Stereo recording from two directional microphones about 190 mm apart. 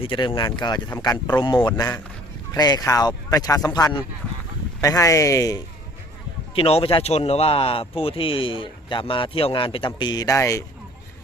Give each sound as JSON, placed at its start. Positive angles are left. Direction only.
{"t": 0.0, "sound": "speech", "side_deg": 25}
{"t": 6.5, "sound": "speech", "side_deg": 30}